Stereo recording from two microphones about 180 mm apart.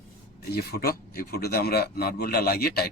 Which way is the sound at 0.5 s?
60° left (ahead or behind).